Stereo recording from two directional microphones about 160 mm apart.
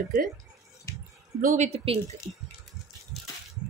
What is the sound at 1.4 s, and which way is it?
Speech, 50° right (ahead or behind).